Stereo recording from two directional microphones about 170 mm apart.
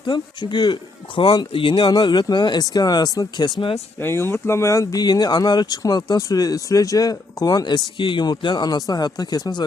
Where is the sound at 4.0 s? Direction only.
15° left (ahead or behind).